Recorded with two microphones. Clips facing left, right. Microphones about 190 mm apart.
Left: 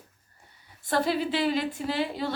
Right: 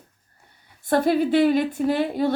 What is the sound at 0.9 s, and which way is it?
A woman's voice, 50° right (ahead or behind).